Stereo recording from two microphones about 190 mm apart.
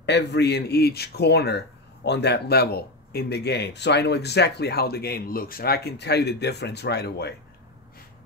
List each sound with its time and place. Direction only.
0.0 s speech: 60° left (ahead or behind)